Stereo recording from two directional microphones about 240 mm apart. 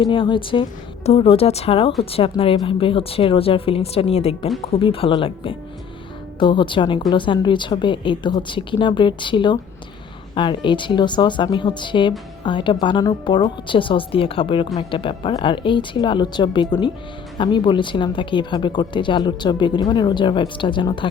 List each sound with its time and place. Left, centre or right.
0.0 s speech: left